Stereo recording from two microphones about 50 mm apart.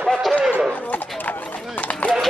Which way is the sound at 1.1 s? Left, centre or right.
Left.